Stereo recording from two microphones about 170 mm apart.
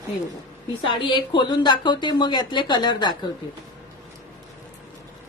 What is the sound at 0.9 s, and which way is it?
Speech, 30° left (ahead or behind).